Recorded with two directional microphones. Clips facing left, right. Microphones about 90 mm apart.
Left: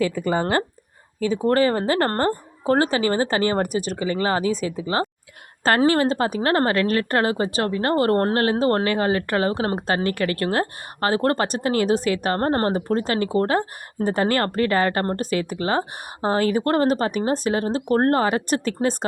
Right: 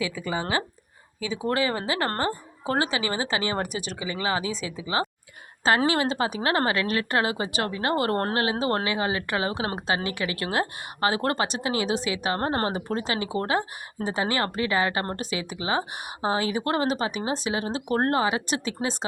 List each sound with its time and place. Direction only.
0.0 s a woman's voice: 55° left (ahead or behind)
14.0 s a woman's voice: 50° left (ahead or behind)